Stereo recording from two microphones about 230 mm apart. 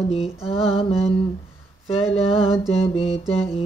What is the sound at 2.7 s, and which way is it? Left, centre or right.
Mantra, left.